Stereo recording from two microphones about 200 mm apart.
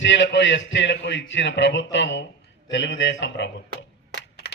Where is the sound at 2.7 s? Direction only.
65° left (ahead or behind).